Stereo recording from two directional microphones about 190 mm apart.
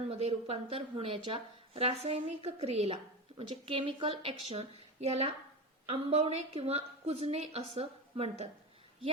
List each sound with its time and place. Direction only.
0.1 s a woman's voice: 35° right (ahead or behind)